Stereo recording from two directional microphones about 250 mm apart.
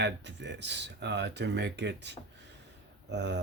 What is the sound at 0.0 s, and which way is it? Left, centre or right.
Speech, right.